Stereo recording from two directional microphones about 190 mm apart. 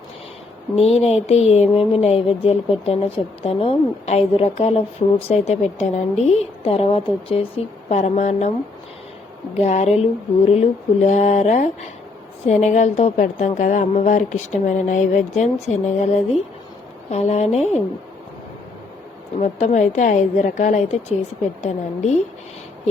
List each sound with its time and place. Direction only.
0.8 s a woman's voice: 35° left (ahead or behind)
9.6 s a woman's voice: 35° left (ahead or behind)
19.4 s a woman's voice: 40° left (ahead or behind)